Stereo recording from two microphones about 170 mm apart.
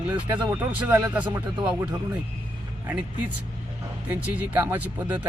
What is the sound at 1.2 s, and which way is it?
Speech, 25° right (ahead or behind).